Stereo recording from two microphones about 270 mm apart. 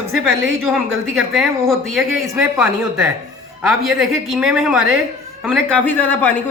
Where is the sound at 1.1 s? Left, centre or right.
Centre.